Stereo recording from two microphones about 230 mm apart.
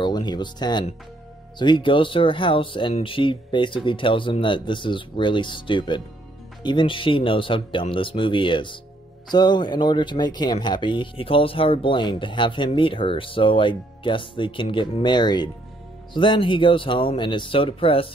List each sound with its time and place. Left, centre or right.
0.0 s speech: centre